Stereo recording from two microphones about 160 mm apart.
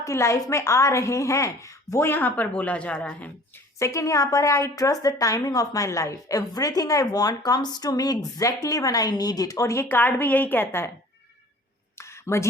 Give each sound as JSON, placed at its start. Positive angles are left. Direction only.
{"t": 0.0, "sound": "a woman's voice", "side_deg": 20}
{"t": 3.8, "sound": "a woman's voice", "side_deg": 20}
{"t": 11.9, "sound": "a sound", "side_deg": 15}